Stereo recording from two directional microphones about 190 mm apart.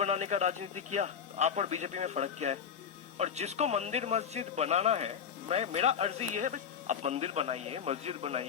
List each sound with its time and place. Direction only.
0.0 s speech: 35° right (ahead or behind)